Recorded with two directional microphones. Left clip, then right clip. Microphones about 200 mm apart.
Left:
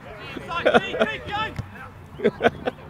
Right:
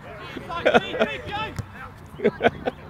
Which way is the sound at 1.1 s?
20° left (ahead or behind).